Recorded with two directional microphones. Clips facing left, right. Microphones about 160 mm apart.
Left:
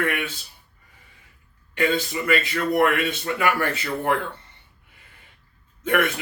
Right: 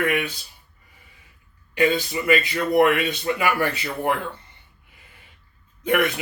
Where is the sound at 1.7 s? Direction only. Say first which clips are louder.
Right 2 dB; 15° right (ahead or behind).